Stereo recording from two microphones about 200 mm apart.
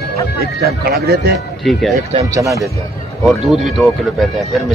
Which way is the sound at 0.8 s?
50° right (ahead or behind).